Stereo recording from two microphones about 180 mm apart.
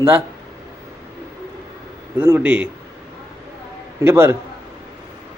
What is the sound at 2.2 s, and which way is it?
Speech, 10° right (ahead or behind).